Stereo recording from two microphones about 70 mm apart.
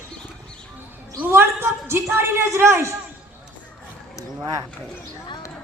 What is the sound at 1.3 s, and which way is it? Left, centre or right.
A man's voice, right.